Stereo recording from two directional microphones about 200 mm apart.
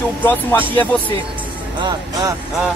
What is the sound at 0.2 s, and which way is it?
Speech, 10° left (ahead or behind).